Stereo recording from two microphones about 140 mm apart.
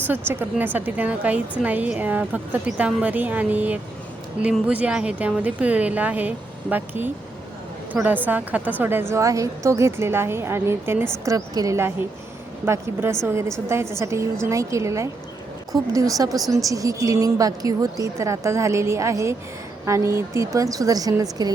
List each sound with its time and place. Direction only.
0.1 s a woman's voice: 15° right (ahead or behind)